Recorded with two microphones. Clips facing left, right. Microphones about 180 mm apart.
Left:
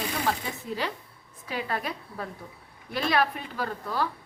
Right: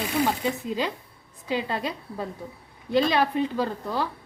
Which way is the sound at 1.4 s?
20° right (ahead or behind).